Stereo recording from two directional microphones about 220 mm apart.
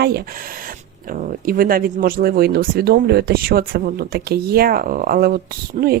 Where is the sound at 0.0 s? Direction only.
45° right (ahead or behind).